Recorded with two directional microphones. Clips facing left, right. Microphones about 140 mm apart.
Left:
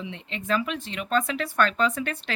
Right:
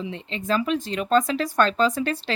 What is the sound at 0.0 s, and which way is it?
A woman's voice, 35° right (ahead or behind).